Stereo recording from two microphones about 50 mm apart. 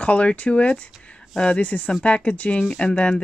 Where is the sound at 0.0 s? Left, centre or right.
Left.